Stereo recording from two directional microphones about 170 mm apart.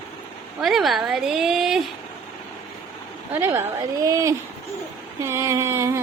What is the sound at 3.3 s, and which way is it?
Speech, 15° right (ahead or behind).